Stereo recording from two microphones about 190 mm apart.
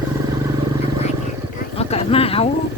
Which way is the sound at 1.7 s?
30° left (ahead or behind).